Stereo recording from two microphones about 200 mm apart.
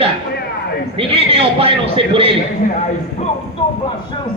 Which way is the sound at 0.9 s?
30° right (ahead or behind).